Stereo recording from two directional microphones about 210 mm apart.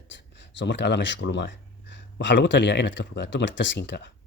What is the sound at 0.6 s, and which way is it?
A man's voice, 55° left (ahead or behind).